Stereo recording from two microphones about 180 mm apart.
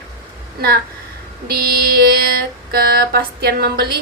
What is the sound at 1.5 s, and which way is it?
A woman's voice, 60° right (ahead or behind).